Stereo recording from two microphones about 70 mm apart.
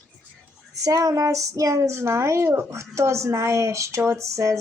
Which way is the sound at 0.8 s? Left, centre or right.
Right.